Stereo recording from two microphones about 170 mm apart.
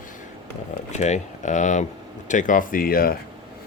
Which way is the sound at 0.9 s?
45° left (ahead or behind).